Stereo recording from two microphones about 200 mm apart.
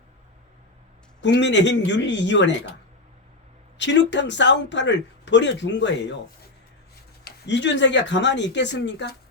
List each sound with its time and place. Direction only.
1.2 s speech: 60° left (ahead or behind)
3.8 s speech: 60° left (ahead or behind)
7.3 s speech: 60° left (ahead or behind)